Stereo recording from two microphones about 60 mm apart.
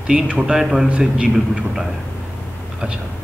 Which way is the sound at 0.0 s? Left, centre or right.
Centre.